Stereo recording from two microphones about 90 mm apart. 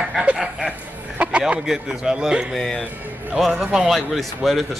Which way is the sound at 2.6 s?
5° left (ahead or behind).